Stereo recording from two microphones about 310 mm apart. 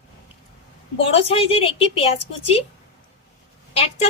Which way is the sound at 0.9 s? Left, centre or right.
Centre.